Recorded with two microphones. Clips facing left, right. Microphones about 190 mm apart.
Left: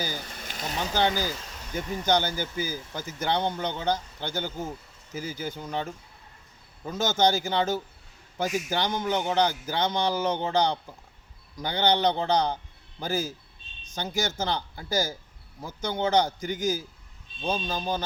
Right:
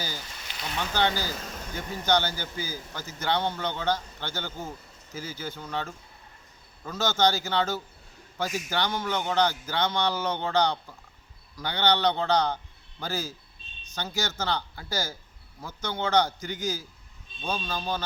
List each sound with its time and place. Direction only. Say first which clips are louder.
0.2 s a sound: left 3 dB; 50° left (ahead or behind)
0.9 s speech: left 1 dB; 15° left (ahead or behind)
7.4 s speech: left 2 dB; 15° left (ahead or behind)